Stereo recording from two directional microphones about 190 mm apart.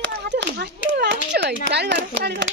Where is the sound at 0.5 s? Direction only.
65° right (ahead or behind).